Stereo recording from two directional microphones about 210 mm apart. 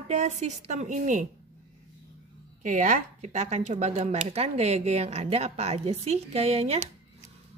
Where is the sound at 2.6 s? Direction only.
35° right (ahead or behind).